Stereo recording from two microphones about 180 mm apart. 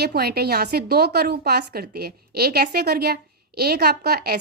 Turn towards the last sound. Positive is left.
turn(degrees=-60)  # may be behind; listen again after turning